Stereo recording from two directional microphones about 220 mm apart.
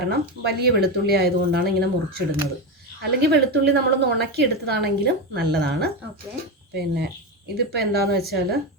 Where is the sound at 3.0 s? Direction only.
45° right (ahead or behind).